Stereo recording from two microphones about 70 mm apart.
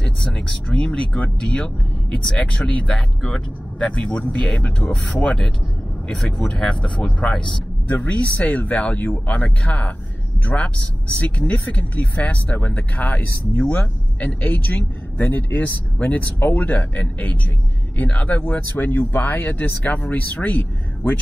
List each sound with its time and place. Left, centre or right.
0.0 s speech: centre
7.9 s speech: left